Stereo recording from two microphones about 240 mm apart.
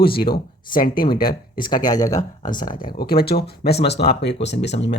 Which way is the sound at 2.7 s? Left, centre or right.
Left.